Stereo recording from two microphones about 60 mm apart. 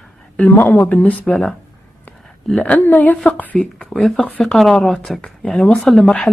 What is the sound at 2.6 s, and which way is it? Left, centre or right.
Speech, left.